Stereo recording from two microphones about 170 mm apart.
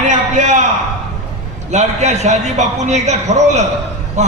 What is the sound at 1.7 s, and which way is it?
A man's voice, 40° right (ahead or behind).